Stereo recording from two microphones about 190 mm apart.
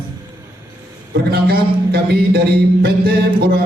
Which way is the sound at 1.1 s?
55° right (ahead or behind).